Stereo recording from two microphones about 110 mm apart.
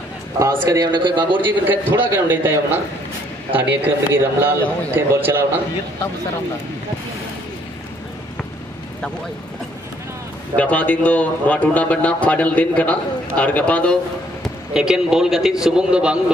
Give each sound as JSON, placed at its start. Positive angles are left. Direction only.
{"t": 0.4, "sound": "a man's voice", "side_deg": -30}
{"t": 0.9, "sound": "a man's voice", "side_deg": -45}
{"t": 1.4, "sound": "a man's voice", "side_deg": -15}
{"t": 10.5, "sound": "a man's voice", "side_deg": 15}
{"t": 14.4, "sound": "a man's voice", "side_deg": -5}